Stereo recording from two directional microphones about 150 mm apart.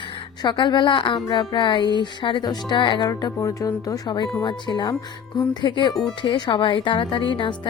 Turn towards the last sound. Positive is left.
turn(degrees=30)  # may be behind; listen again after turning